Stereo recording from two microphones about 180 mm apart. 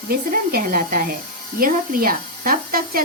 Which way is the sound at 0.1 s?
55° right (ahead or behind).